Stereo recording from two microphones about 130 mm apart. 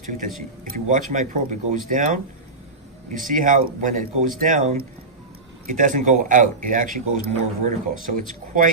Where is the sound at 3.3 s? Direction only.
90° right.